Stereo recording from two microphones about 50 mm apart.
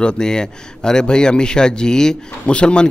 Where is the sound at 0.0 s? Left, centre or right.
Centre.